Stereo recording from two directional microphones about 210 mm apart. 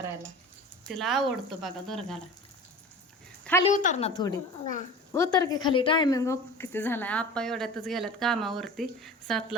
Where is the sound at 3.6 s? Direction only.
35° left (ahead or behind).